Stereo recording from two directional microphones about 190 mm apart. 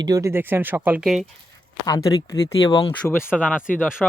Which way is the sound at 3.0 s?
10° left (ahead or behind).